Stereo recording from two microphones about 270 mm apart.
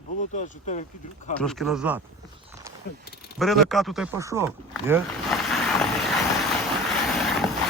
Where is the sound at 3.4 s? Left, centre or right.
Centre.